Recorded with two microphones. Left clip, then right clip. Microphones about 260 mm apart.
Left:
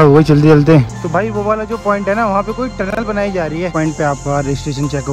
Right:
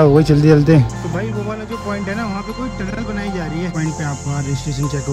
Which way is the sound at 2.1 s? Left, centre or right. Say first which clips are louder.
Left 10 dB; centre.